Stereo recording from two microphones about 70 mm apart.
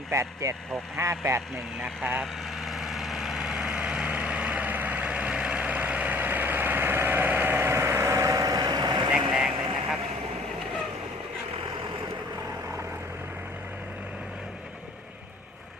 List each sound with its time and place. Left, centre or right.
0.1 s speech: right
2.2 s vehicle: centre; by 9.1 s right
9.3 s vehicle: centre